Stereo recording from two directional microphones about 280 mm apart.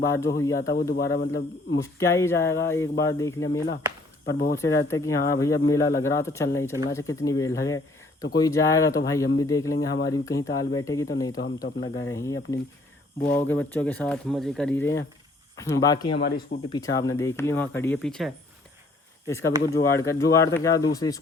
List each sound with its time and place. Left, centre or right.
0.1 s speech: centre
0.6 s speech: left
1.8 s speech: centre
4.3 s speech: left
4.5 s speech: centre
16.1 s speech: left
16.6 s speech: centre
19.3 s speech: centre